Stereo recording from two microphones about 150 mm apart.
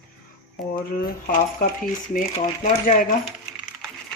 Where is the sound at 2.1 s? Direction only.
55° left (ahead or behind).